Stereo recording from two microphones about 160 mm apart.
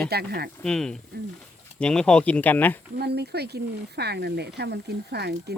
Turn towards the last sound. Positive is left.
turn(degrees=-90)